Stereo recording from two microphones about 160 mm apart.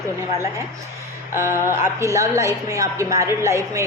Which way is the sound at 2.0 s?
20° right (ahead or behind).